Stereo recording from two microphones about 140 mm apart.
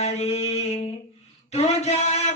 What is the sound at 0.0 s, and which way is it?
Mantra, 50° left (ahead or behind).